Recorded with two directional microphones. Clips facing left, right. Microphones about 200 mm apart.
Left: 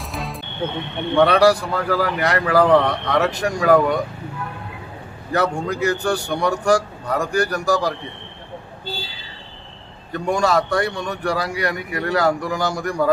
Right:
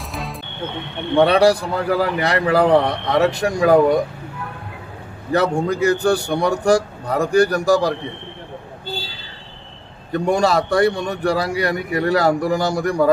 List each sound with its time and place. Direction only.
0.1 s music: centre (ahead or behind)
1.1 s a man's voice: 30° right (ahead or behind)
5.3 s a man's voice: 30° right (ahead or behind)
10.1 s a man's voice: 30° right (ahead or behind)